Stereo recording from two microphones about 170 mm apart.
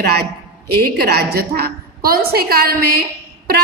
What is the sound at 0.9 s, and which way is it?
A woman's voice, 65° right (ahead or behind).